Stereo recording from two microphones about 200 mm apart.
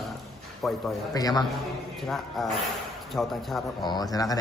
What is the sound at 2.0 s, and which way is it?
A man's voice, centre (ahead or behind).